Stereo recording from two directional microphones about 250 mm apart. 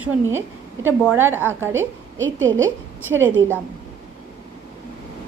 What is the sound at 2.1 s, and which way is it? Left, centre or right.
Speech, right.